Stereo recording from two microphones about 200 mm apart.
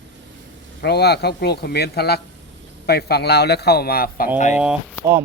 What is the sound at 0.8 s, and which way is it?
Speech, 55° left (ahead or behind).